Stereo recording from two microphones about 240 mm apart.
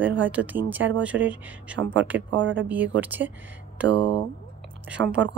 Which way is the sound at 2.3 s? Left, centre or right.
Right.